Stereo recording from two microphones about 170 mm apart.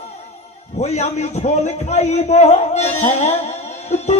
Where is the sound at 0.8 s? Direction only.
40° left (ahead or behind).